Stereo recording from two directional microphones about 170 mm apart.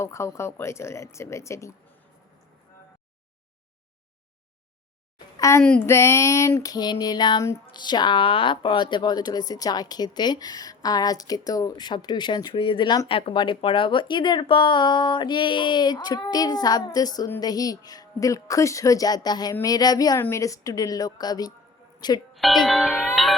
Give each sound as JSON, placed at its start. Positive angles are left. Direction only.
{"t": 0.0, "sound": "speech", "side_deg": 15}
{"t": 5.4, "sound": "a woman's voice", "side_deg": 15}
{"t": 5.6, "sound": "speech", "side_deg": 5}
{"t": 5.9, "sound": "female singing", "side_deg": 15}
{"t": 22.4, "sound": "music", "side_deg": 0}